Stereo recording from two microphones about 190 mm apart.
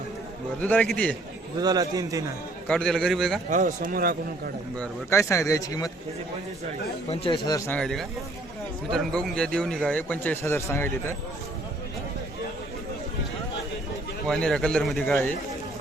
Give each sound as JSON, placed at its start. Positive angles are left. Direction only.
{"t": 0.6, "sound": "speech", "side_deg": 10}
{"t": 1.6, "sound": "a man's voice", "side_deg": -20}
{"t": 2.6, "sound": "a man's voice", "side_deg": 5}
{"t": 3.5, "sound": "a man's voice", "side_deg": -45}
{"t": 4.8, "sound": "speech", "side_deg": 15}
{"t": 7.1, "sound": "speech", "side_deg": 25}
{"t": 7.7, "sound": "a man's voice", "side_deg": 5}
{"t": 14.3, "sound": "a man's voice", "side_deg": 5}